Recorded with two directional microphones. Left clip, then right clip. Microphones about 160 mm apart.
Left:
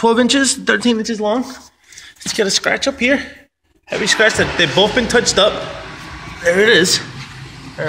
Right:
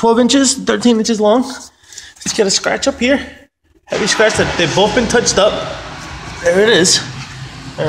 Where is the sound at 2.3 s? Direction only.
5° left (ahead or behind).